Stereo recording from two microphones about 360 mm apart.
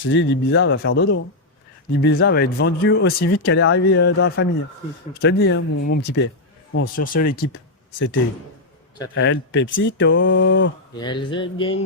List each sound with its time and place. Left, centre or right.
0.0 s speech: left
9.1 s speech: left
10.9 s speech: centre